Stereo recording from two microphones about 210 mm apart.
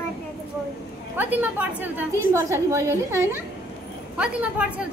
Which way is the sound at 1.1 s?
10° right (ahead or behind).